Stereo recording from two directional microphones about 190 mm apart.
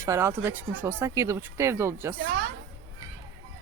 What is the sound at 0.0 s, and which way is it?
Speech, 15° right (ahead or behind).